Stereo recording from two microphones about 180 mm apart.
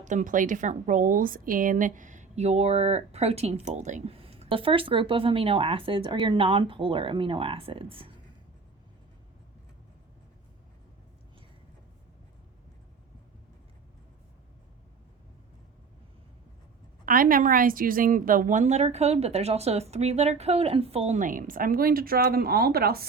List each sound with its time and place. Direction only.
0.0 s a woman's voice: 45° right (ahead or behind)
17.1 s a woman's voice: 50° right (ahead or behind)